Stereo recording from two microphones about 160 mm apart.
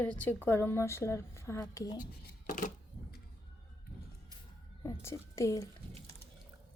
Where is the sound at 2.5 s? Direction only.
55° left (ahead or behind).